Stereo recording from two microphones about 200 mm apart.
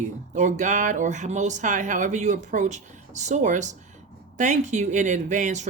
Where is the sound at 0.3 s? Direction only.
35° right (ahead or behind).